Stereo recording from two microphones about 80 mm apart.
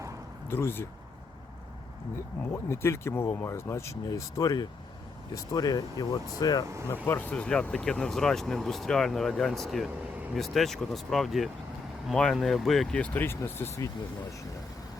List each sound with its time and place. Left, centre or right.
0.4 s speech: left
2.1 s speech: left
4.1 s speech: left
6.9 s speech: left; by 13.0 s centre
13.0 s speech: left